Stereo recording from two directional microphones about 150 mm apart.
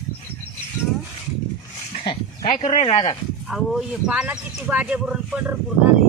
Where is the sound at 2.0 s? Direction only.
35° left (ahead or behind).